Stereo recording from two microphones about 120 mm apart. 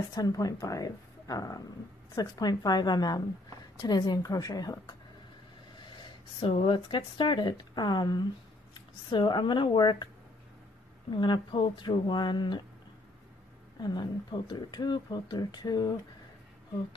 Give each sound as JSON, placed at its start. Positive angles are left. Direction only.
{"t": 0.1, "sound": "speech", "side_deg": 30}
{"t": 6.4, "sound": "speech", "side_deg": 50}
{"t": 11.1, "sound": "speech", "side_deg": 40}
{"t": 13.7, "sound": "speech", "side_deg": 35}